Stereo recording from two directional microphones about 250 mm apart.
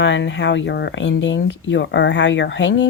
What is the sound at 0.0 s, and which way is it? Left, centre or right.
Speech, left.